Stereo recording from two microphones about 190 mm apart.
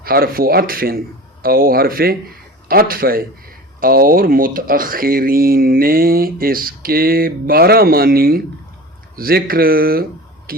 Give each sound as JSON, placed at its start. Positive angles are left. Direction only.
{"t": 0.0, "sound": "speech", "side_deg": -50}